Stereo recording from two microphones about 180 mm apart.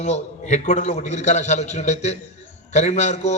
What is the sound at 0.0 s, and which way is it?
A man's voice, 40° left (ahead or behind).